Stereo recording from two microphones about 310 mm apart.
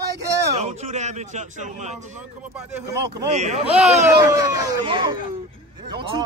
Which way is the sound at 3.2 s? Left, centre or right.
Right.